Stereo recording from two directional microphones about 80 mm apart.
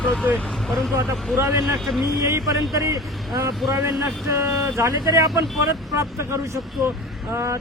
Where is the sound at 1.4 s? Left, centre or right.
Right.